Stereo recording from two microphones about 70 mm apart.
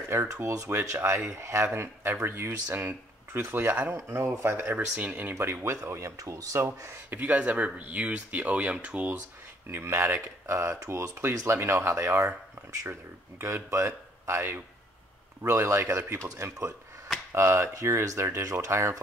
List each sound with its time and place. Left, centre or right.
0.1 s speech: right
3.9 s speech: right
4.7 s speech: right
5.4 s speech: right
7.1 s speech: right
9.7 s speech: right
13.4 s speech: right
17.3 s speech: right